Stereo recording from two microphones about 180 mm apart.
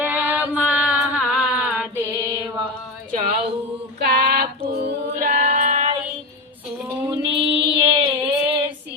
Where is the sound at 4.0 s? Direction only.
55° right (ahead or behind).